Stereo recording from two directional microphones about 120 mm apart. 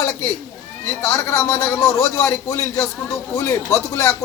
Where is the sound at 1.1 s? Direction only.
25° left (ahead or behind).